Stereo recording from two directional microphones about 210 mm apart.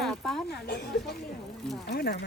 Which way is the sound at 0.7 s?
55° left (ahead or behind).